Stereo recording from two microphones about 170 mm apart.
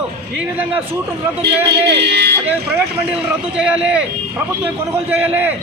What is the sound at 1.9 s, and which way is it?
Speech, 75° right (ahead or behind).